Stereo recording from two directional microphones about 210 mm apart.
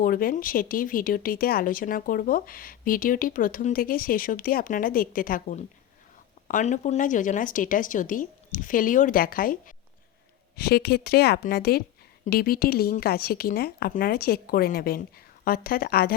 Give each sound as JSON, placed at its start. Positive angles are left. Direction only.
{"t": 0.0, "sound": "speech", "side_deg": 45}